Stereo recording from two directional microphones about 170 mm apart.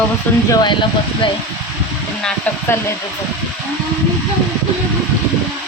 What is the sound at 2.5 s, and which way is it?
Speech, 10° left (ahead or behind).